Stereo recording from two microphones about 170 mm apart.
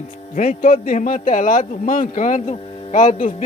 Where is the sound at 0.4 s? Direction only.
50° left (ahead or behind).